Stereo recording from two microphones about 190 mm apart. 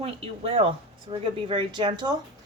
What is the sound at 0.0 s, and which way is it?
Speech, 30° right (ahead or behind).